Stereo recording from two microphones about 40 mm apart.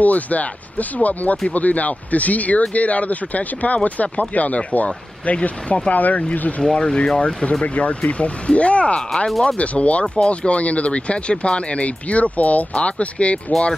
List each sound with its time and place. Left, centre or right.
0.0 s speech: left
6.6 s speech: centre
7.6 s speech: left
13.5 s speech: centre